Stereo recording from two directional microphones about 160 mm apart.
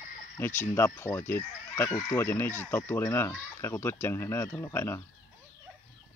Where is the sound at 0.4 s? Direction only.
15° left (ahead or behind).